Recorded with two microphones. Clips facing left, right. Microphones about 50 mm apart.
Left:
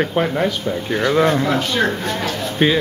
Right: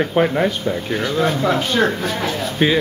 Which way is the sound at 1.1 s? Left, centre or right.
Left.